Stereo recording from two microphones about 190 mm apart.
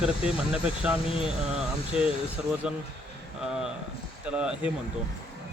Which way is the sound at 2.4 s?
5° right (ahead or behind).